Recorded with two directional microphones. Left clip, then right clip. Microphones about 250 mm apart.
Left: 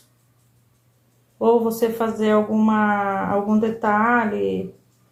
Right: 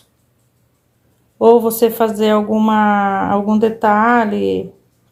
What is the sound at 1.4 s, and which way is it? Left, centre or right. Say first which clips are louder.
Speech: right 8 dB; right.